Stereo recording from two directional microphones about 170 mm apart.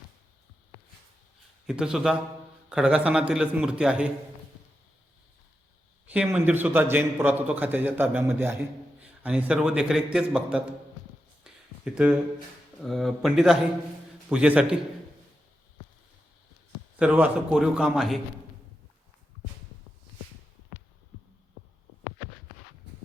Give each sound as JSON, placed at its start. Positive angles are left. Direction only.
{"t": 1.6, "sound": "a man's voice", "side_deg": -5}
{"t": 6.1, "sound": "a man's voice", "side_deg": -10}
{"t": 11.5, "sound": "a sound", "side_deg": -5}
{"t": 11.9, "sound": "a man's voice", "side_deg": -5}
{"t": 17.0, "sound": "a man's voice", "side_deg": -5}